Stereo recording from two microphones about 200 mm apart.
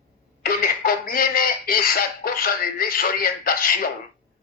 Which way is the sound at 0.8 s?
45° left (ahead or behind).